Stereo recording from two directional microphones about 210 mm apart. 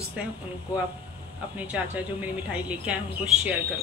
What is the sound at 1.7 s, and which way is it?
Speech, 5° right (ahead or behind).